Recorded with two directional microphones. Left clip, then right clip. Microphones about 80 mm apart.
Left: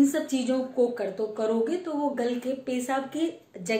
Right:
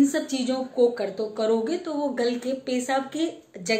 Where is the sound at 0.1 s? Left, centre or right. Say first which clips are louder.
Right 1 dB; centre.